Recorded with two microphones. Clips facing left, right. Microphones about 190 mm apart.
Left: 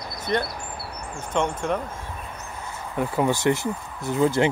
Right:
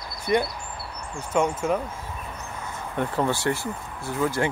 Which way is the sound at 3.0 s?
10° left (ahead or behind).